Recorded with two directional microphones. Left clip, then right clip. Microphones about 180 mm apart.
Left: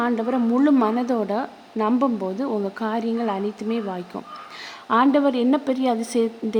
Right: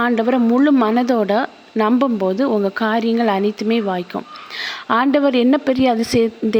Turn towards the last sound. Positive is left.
turn(degrees=-20)  # may be behind; listen again after turning